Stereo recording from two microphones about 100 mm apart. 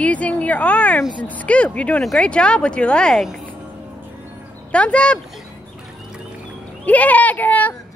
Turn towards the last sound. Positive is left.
turn(degrees=15)  # may be behind; listen again after turning